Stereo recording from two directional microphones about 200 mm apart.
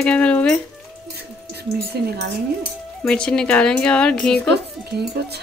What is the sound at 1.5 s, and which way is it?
Speech, 55° right (ahead or behind).